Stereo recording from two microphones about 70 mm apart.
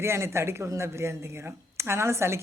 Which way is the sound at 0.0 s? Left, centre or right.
Right.